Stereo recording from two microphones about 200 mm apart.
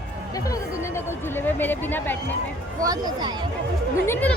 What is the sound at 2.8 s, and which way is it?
Speech, 20° right (ahead or behind).